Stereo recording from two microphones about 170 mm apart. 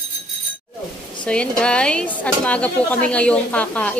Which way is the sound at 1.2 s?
5° left (ahead or behind).